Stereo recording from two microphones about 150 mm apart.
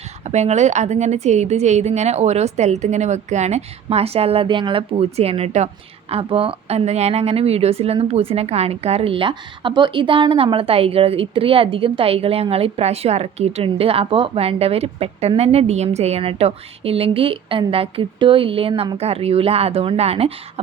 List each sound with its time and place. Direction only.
0.3 s a woman's voice: 50° right (ahead or behind)